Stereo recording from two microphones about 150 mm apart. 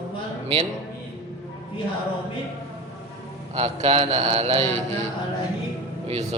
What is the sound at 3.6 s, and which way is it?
Speech, 45° right (ahead or behind).